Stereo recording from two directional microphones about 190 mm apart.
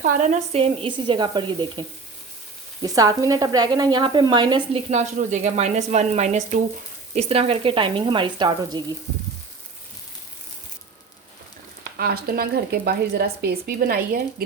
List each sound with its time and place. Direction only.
0.0 s a woman's voice: 40° right (ahead or behind); by 1.8 s 25° right (ahead or behind)
2.8 s a woman's voice: 20° right (ahead or behind)
4.9 s a woman's voice: 35° right (ahead or behind)
11.9 s speech: 55° right (ahead or behind)